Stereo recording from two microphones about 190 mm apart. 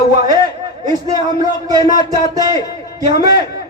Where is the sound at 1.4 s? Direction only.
20° right (ahead or behind).